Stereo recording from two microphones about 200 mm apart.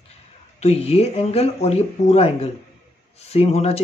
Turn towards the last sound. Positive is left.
turn(degrees=30)  # may be behind; listen again after turning